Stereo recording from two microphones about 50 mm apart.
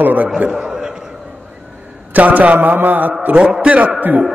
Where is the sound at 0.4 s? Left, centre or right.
Centre.